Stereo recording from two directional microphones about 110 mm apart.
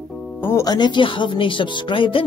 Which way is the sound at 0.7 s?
40° left (ahead or behind).